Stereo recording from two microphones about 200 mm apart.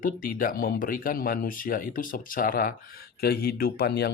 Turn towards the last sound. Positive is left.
turn(degrees=55)  # may be behind; listen again after turning